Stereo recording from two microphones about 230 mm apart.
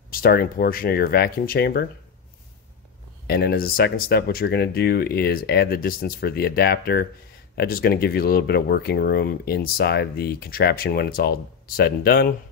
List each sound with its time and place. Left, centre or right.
0.1 s speech: left
3.3 s speech: left